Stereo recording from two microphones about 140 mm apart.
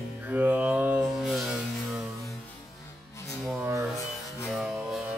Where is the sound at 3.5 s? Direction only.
15° right (ahead or behind).